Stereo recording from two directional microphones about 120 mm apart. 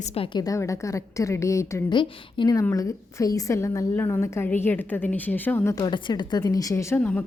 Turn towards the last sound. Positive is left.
turn(degrees=25)  # may be behind; listen again after turning